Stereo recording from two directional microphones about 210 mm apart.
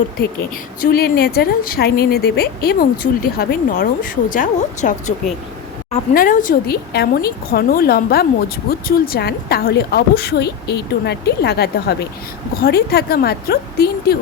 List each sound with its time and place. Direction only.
0.8 s a woman's voice: 45° left (ahead or behind)